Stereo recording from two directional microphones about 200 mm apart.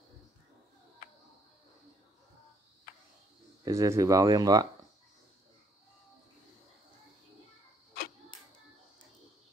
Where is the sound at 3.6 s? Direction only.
15° right (ahead or behind).